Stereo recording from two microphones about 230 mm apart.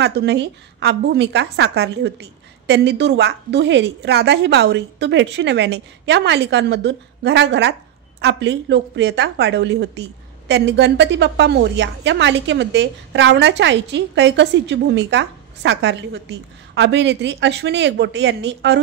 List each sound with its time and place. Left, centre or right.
0.0 s a woman's voice: right